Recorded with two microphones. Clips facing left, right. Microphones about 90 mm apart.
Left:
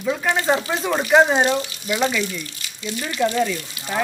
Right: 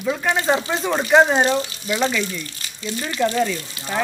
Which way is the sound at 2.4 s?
35° right (ahead or behind).